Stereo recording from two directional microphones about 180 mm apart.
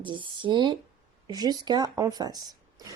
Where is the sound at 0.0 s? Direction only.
25° right (ahead or behind).